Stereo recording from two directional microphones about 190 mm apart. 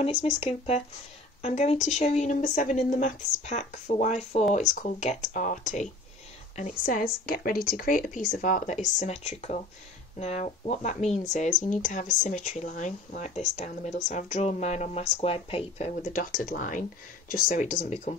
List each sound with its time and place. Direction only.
0.2 s speech: 35° left (ahead or behind)
15.9 s speech: 45° left (ahead or behind)